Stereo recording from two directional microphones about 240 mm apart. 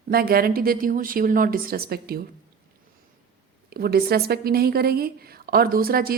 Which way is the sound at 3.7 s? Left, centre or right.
Right.